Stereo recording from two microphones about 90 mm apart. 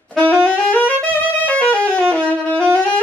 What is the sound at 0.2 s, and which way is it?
Saxophone, 15° left (ahead or behind).